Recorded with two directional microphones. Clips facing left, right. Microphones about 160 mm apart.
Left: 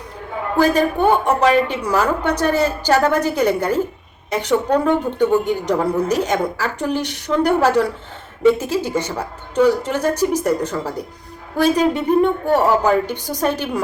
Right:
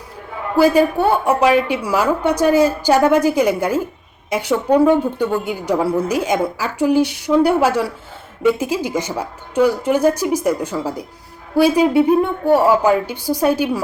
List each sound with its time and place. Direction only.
0.5 s a woman's voice: 10° right (ahead or behind)